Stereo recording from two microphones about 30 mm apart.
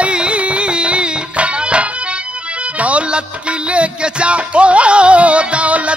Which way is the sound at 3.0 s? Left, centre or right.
Right.